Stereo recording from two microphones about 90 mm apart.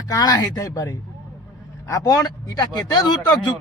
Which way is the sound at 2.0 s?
45° left (ahead or behind).